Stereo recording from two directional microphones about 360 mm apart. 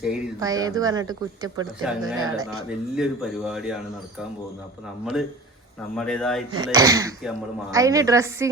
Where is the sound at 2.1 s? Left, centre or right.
Right.